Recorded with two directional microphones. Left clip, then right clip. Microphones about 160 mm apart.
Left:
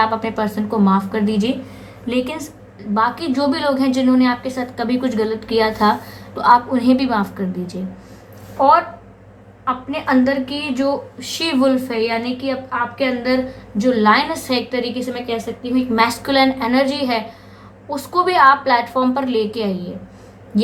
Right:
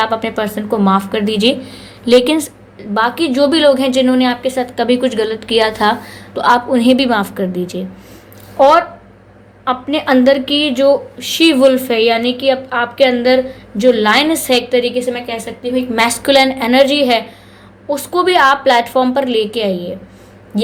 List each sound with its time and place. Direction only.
0.0 s a woman's voice: 30° right (ahead or behind)
2.0 s a woman's voice: 50° right (ahead or behind)
2.9 s a woman's voice: 35° right (ahead or behind)
9.6 s a woman's voice: 40° right (ahead or behind)
10.8 s a woman's voice: 30° right (ahead or behind)